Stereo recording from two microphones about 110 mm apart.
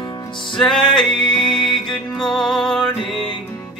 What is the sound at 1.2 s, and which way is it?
Music, 45° left (ahead or behind).